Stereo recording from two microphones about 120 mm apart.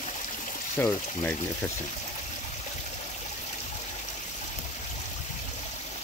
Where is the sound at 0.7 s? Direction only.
20° left (ahead or behind).